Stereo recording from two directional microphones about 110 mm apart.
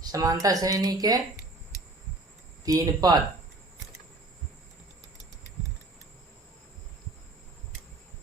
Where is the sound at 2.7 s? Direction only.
35° right (ahead or behind).